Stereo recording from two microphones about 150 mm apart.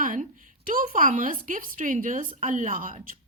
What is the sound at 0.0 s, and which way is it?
A woman's voice, 65° right (ahead or behind).